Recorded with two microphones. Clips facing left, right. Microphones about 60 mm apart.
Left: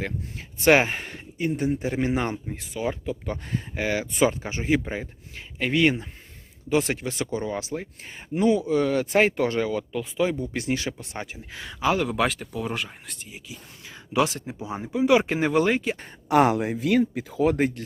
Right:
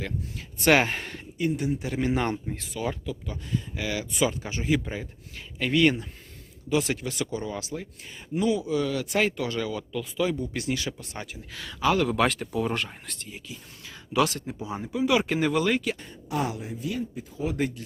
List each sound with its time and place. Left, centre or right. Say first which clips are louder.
0.0 s speech: left 2 dB; left
1.4 s speech: left 2 dB; left
2.1 s speech: even; centre
3.2 s speech: left 2 dB; left
6.7 s speech: left 2 dB; left; by 12.1 s centre
12.1 s speech: right 1 dB; centre
13.8 s speech: left 1 dB; left
16.3 s speech: left 10 dB; left